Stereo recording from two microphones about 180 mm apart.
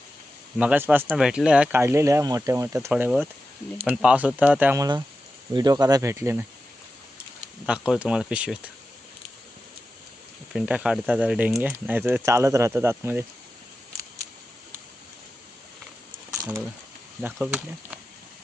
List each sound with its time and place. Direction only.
0.6 s speech: 5° right (ahead or behind)
7.4 s speech: 5° right (ahead or behind)
10.5 s speech: 5° right (ahead or behind)
16.4 s a sound: 15° right (ahead or behind)
17.3 s speech: 5° right (ahead or behind)